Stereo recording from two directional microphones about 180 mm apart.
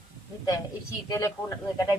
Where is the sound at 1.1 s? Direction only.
15° left (ahead or behind).